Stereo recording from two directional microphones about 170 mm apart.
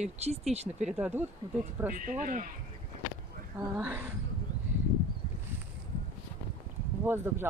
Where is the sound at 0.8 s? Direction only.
5° right (ahead or behind).